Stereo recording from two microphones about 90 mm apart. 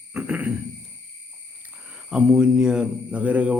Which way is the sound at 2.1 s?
10° right (ahead or behind).